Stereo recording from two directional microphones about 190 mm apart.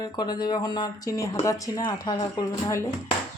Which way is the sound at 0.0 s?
20° left (ahead or behind).